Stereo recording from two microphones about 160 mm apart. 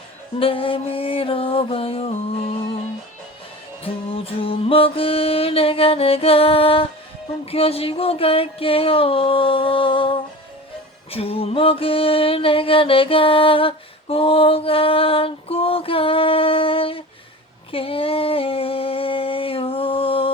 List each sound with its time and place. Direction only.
0.3 s music: 35° left (ahead or behind)
3.8 s music: 35° left (ahead or behind)
17.7 s a sound: 35° left (ahead or behind)